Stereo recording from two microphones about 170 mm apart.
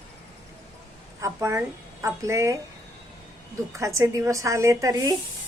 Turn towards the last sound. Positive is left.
turn(degrees=-20)  # may be behind; listen again after turning